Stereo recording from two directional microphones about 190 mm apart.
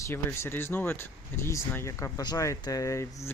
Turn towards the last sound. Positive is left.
turn(degrees=15)  # may be behind; listen again after turning